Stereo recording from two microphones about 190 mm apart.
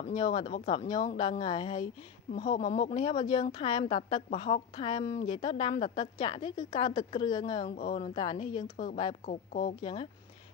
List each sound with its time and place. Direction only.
0.1 s a woman's voice: 25° left (ahead or behind)
2.6 s a woman's voice: 35° left (ahead or behind)
7.6 s a woman's voice: 35° left (ahead or behind)
8.7 s speech: 45° left (ahead or behind)
9.8 s a woman's voice: 30° left (ahead or behind)